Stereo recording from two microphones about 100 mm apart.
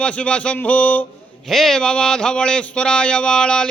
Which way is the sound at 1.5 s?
5° left (ahead or behind).